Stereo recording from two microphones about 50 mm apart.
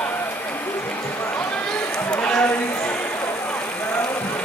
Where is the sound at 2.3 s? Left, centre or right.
Left.